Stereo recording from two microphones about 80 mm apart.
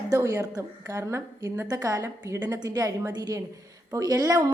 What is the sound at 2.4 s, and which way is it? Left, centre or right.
A woman's voice, right.